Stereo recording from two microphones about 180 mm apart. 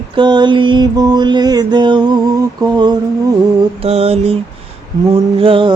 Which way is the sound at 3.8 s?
35° right (ahead or behind).